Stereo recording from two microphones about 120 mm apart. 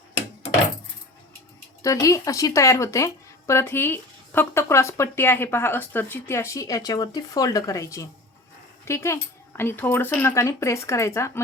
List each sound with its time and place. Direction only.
1.8 s speech: 30° left (ahead or behind)